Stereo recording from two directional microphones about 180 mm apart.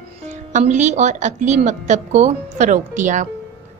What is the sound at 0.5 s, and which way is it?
Speech, 40° right (ahead or behind).